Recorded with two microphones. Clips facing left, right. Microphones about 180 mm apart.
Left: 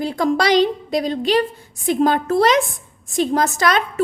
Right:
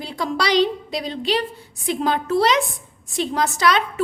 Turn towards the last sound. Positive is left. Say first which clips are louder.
# left 1 dB
turn(degrees=45)  # may be behind; listen again after turning